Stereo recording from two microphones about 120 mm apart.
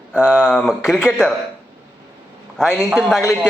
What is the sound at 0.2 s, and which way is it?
Speech, 5° right (ahead or behind).